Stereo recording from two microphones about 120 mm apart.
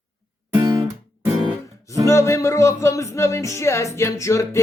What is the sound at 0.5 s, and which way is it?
Guitar, 30° right (ahead or behind).